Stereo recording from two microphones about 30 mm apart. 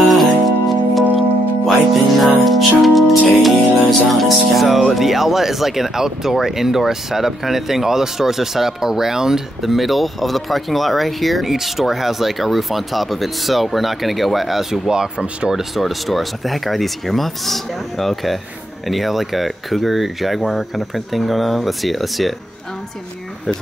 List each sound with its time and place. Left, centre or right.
0.0 s music: centre
4.1 s speech: centre
9.7 s speech: centre
11.4 s speech: centre
14.9 s speech: right
15.7 s speech: centre